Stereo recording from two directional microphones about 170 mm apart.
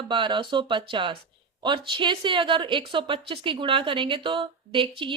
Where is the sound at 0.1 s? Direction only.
30° right (ahead or behind).